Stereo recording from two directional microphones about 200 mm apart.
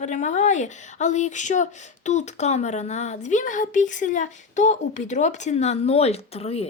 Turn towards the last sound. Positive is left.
turn(degrees=30)  # may be behind; listen again after turning